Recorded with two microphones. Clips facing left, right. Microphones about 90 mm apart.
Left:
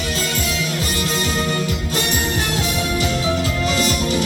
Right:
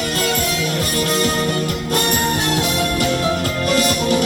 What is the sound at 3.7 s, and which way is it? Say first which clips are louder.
Music: right 6 dB; 55° right (ahead or behind).